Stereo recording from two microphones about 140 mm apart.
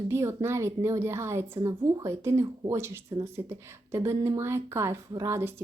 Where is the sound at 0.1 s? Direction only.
20° right (ahead or behind).